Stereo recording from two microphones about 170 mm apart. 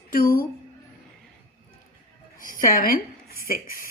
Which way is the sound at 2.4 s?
55° left (ahead or behind).